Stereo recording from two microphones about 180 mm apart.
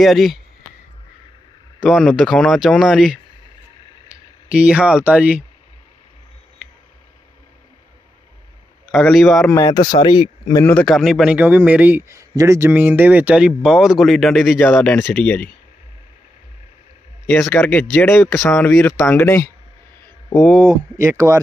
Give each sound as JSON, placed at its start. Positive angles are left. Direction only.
{"t": 0.0, "sound": "speech", "side_deg": 0}
{"t": 1.8, "sound": "speech", "side_deg": 0}
{"t": 8.9, "sound": "speech", "side_deg": 0}
{"t": 9.5, "sound": "speech", "side_deg": 15}
{"t": 9.9, "sound": "speech", "side_deg": 30}
{"t": 10.7, "sound": "a man's voice", "side_deg": 5}
{"t": 17.3, "sound": "speech", "side_deg": 10}
{"t": 21.0, "sound": "a man's voice", "side_deg": -15}